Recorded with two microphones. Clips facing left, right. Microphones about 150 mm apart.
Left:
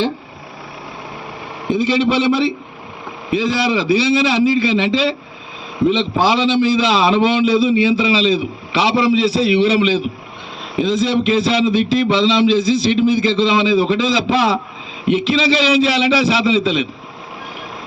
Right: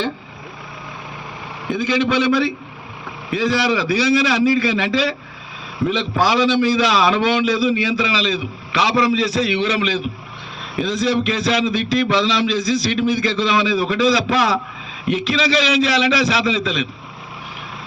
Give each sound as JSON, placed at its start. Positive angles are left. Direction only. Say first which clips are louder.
{"t": 1.7, "sound": "a man's voice", "louder": "left 3 dB", "side_deg": 25}